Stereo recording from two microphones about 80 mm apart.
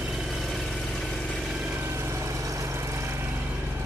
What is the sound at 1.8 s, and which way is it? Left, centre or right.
Vehicle, right.